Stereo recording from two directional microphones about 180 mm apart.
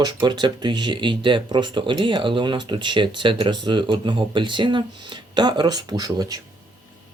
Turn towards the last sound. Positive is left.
turn(degrees=-20)  # may be behind; listen again after turning